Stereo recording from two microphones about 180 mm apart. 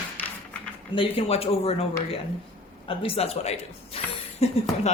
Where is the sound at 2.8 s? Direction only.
30° left (ahead or behind).